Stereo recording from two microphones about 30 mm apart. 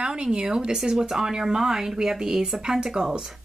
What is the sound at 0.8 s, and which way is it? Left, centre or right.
Speech, centre.